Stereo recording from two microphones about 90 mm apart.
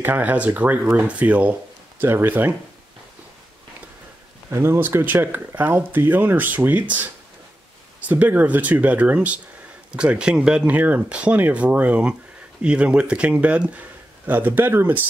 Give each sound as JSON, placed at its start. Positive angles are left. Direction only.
{"t": 0.0, "sound": "speech", "side_deg": -20}
{"t": 4.5, "sound": "speech", "side_deg": -30}
{"t": 8.1, "sound": "speech", "side_deg": -20}